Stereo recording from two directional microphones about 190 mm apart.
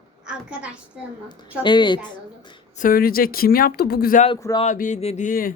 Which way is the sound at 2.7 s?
50° left (ahead or behind).